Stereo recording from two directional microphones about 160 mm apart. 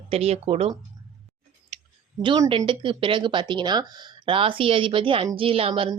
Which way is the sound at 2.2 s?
30° right (ahead or behind).